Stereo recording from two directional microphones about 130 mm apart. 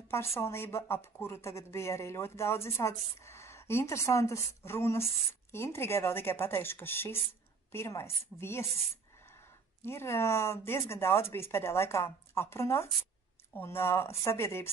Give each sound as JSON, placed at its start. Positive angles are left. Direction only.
{"t": 0.4, "sound": "a woman's voice", "side_deg": 20}
{"t": 9.8, "sound": "a woman's voice", "side_deg": 20}